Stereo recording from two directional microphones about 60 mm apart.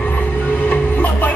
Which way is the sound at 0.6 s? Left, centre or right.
Left.